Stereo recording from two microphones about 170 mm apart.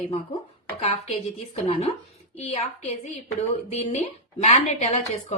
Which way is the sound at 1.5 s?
35° left (ahead or behind).